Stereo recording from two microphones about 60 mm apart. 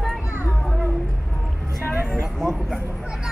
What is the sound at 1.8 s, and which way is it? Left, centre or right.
Vehicle, right.